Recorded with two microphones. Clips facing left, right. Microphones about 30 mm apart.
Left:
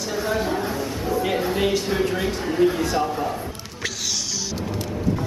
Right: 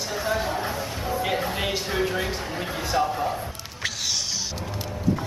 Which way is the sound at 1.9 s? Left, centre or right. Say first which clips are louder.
Left 3 dB; centre.